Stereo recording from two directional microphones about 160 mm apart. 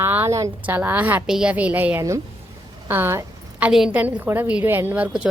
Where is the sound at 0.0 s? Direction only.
15° right (ahead or behind).